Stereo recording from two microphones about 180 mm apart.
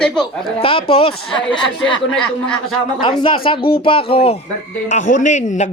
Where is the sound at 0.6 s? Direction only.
30° left (ahead or behind).